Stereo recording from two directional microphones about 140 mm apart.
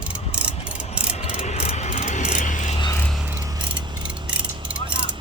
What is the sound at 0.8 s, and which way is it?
Ratchet, 50° left (ahead or behind).